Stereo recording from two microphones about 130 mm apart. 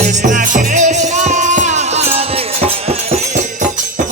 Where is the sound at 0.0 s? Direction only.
65° right (ahead or behind).